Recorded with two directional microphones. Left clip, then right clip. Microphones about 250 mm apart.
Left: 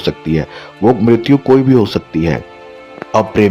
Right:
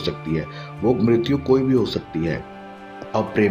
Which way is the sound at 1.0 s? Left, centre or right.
Left.